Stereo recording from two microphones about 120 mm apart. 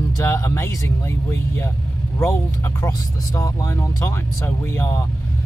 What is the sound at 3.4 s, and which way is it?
Speech, 30° left (ahead or behind).